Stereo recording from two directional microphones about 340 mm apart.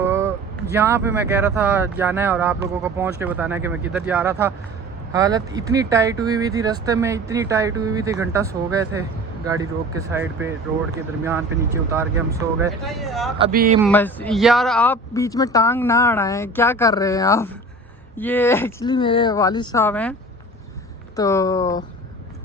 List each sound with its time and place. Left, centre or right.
0.0 s a sound: centre
0.7 s speech: centre
10.1 s speech: centre
13.4 s speech: right
13.8 s speech: centre
21.2 s speech: centre